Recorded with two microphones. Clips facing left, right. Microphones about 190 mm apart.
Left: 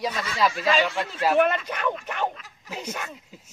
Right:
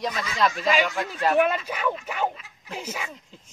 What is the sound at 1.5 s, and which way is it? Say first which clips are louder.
Speech: even; 5° right (ahead or behind).